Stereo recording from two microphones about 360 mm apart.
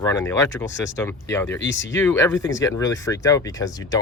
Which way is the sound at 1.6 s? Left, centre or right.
Left.